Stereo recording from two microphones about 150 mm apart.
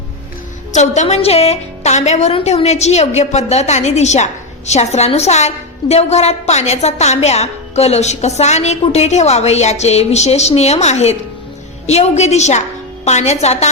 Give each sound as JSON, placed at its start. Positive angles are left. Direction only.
{"t": 0.7, "sound": "a woman's voice", "side_deg": 50}